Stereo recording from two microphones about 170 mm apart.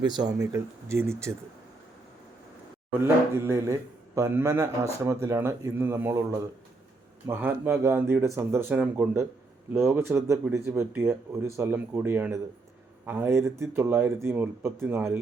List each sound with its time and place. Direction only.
0.0 s speech: 25° right (ahead or behind)
3.0 s speech: 15° right (ahead or behind)